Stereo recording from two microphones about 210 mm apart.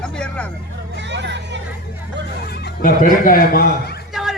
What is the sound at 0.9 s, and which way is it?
Hubbub, 55° right (ahead or behind).